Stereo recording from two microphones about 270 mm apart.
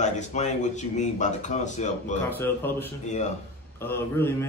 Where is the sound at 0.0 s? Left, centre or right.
Left.